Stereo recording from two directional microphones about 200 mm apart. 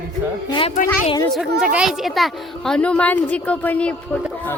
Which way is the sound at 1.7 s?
Centre (ahead or behind).